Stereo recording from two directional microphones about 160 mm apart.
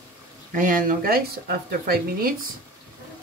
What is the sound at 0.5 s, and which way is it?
A woman's voice, 55° right (ahead or behind).